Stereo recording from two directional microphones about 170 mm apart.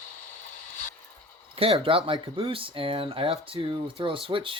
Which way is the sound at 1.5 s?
35° right (ahead or behind).